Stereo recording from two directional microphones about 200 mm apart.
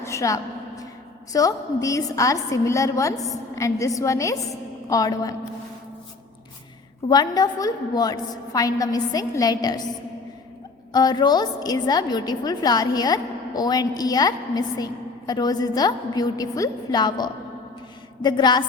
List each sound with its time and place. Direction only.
0.0 s a sound: 15° left (ahead or behind)
1.3 s a woman's voice: 15° left (ahead or behind)
7.1 s a woman's voice: 20° left (ahead or behind)
10.9 s a woman's voice: 20° left (ahead or behind)